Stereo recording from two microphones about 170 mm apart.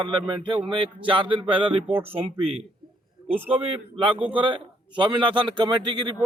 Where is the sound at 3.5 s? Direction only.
35° right (ahead or behind).